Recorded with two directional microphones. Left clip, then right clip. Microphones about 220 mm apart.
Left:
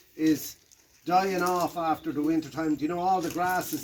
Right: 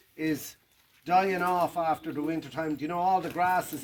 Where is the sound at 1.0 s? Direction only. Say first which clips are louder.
Even; 20° right (ahead or behind).